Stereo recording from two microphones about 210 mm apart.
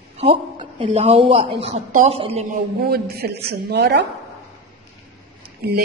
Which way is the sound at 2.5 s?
50° right (ahead or behind).